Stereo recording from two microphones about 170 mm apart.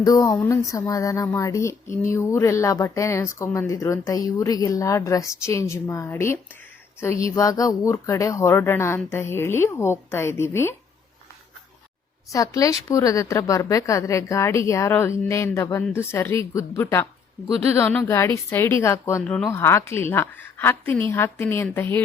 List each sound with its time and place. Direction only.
0.0 s speech: 20° left (ahead or behind)
12.3 s speech: 20° left (ahead or behind)